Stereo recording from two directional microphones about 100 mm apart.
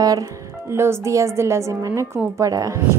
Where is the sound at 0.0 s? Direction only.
40° right (ahead or behind).